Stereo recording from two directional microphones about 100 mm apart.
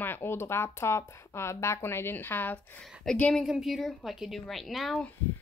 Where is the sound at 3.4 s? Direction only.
5° right (ahead or behind).